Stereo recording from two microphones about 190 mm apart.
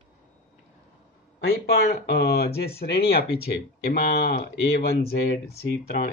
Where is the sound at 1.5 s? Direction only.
55° left (ahead or behind).